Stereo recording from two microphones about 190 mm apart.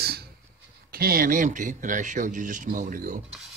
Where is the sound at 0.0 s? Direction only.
55° right (ahead or behind).